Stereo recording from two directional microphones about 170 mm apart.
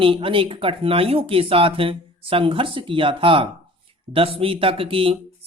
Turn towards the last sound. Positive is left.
turn(degrees=-30)  # may be behind; listen again after turning